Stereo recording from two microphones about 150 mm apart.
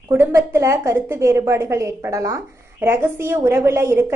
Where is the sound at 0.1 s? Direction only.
15° right (ahead or behind).